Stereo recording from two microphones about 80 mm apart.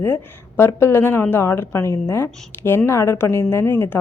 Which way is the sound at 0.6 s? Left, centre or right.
Left.